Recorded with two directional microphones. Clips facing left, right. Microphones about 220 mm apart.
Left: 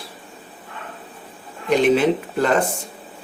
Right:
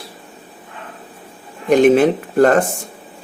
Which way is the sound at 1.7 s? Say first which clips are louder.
Right 5 dB; 50° right (ahead or behind).